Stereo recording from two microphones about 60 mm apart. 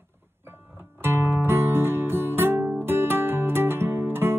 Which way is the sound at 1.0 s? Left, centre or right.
Right.